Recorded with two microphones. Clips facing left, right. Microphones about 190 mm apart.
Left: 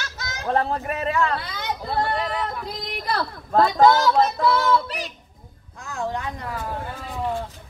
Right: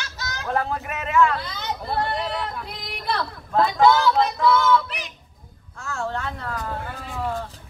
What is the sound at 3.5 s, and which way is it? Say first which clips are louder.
Speech: left 1 dB; 40° left (ahead or behind).